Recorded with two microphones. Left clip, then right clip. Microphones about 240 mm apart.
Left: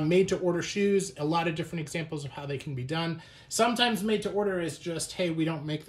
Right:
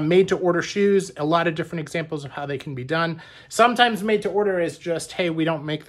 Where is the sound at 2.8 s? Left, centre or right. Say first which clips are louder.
Right 11 dB; right.